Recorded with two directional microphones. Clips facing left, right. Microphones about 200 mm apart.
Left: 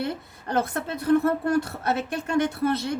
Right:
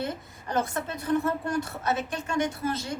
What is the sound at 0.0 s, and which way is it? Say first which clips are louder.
A woman's voice: left 3 dB; 60° left (ahead or behind).